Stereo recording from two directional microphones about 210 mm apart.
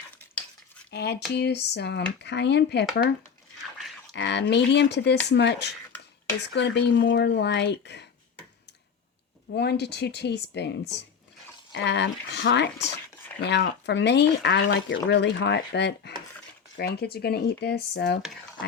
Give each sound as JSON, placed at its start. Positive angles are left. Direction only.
{"t": 0.9, "sound": "speech", "side_deg": 50}
{"t": 4.1, "sound": "speech", "side_deg": 55}
{"t": 9.5, "sound": "speech", "side_deg": 50}